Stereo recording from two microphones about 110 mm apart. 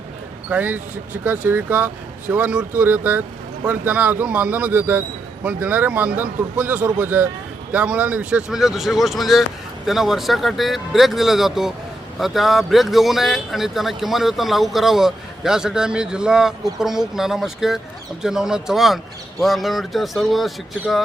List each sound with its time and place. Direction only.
0.5 s a man's voice: 15° right (ahead or behind)